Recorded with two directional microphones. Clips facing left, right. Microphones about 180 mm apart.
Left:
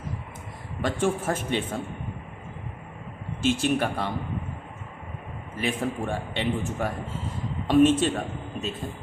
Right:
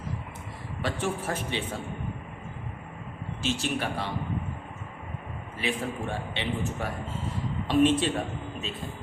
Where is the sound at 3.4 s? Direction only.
50° left (ahead or behind).